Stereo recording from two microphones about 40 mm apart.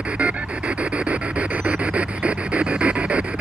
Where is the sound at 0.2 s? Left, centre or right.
Right.